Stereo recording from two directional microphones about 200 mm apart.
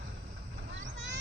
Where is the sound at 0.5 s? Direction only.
65° right (ahead or behind).